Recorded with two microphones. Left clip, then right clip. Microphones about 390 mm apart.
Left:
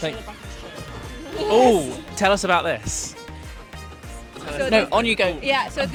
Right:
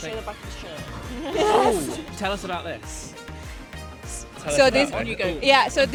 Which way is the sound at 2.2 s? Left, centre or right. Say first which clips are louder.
Left 11 dB; left.